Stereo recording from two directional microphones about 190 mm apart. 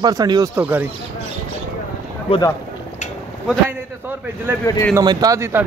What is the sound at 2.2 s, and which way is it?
Speech, 30° left (ahead or behind).